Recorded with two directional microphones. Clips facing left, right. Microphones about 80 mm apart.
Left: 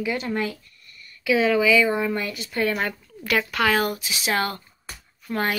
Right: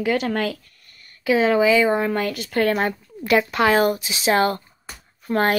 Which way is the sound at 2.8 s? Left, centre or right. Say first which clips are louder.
Right 5 dB; right.